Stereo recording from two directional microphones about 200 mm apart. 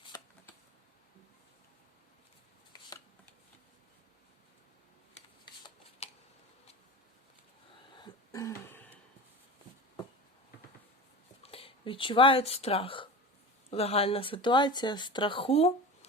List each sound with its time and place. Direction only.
7.9 s throat clearing: 20° left (ahead or behind)
11.4 s speech: 30° left (ahead or behind)